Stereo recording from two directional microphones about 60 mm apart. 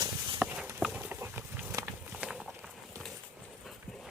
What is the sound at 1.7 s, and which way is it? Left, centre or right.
Walk, right.